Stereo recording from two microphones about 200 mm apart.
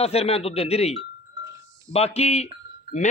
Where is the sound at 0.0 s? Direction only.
30° left (ahead or behind).